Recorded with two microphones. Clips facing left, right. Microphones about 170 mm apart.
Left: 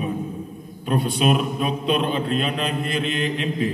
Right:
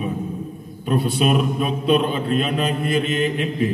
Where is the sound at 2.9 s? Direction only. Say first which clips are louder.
Right 4 dB; 45° right (ahead or behind).